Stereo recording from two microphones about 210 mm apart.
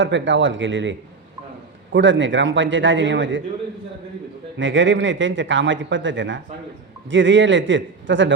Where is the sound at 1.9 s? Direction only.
60° right (ahead or behind).